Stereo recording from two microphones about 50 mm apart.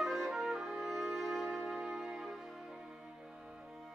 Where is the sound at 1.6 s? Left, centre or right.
Centre.